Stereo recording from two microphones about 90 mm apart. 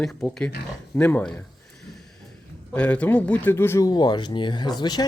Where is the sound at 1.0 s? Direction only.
20° left (ahead or behind).